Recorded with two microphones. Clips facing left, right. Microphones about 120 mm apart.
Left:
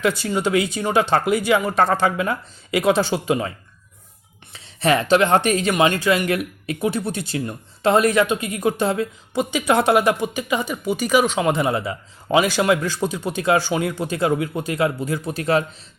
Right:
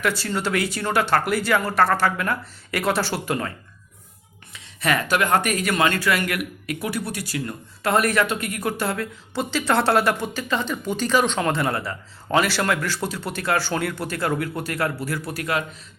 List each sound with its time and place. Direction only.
0.0 s speech: 15° left (ahead or behind)
4.5 s speech: 30° left (ahead or behind); by 11.5 s 10° left (ahead or behind)
11.5 s a man's voice: 20° left (ahead or behind)